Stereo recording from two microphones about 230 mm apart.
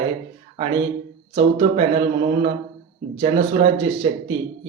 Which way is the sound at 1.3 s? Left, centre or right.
Right.